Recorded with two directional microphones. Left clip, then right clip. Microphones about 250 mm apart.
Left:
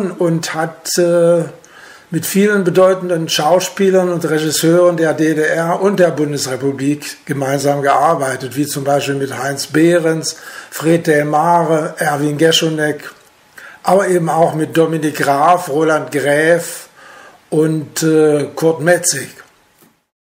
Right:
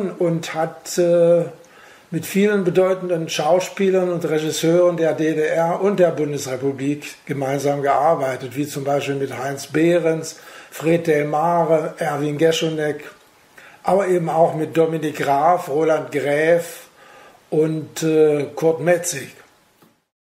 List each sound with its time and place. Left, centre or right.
0.0 s speech: centre